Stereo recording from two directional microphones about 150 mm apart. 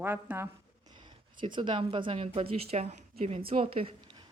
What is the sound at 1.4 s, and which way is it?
Speech, 35° right (ahead or behind).